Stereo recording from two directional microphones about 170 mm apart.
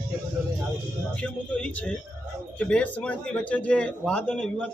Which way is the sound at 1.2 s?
5° left (ahead or behind).